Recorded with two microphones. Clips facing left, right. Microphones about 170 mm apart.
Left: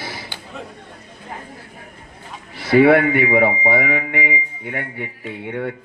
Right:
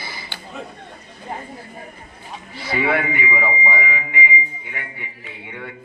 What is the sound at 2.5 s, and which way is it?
Speech, 70° left (ahead or behind).